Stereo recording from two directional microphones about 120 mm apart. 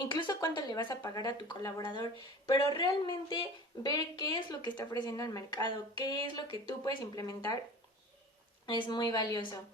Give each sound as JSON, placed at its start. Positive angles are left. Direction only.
{"t": 0.0, "sound": "speech", "side_deg": 40}
{"t": 8.6, "sound": "speech", "side_deg": 40}